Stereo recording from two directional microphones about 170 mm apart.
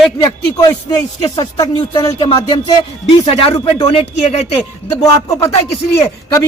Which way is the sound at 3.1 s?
35° left (ahead or behind).